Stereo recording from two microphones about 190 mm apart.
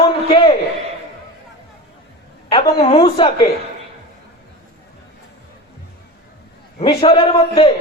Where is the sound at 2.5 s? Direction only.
30° left (ahead or behind).